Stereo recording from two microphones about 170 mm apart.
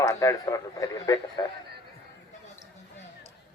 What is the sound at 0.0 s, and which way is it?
A man's voice, 20° left (ahead or behind).